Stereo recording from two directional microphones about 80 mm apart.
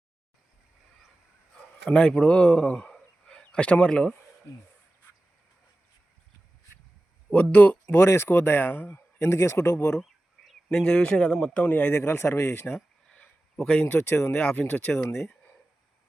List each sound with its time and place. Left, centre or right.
1.9 s a man's voice: centre
7.5 s speech: left
8.0 s speech: left
10.0 s speech: centre
12.0 s speech: left
13.1 s a sound: centre
13.8 s speech: left
14.3 s speech: centre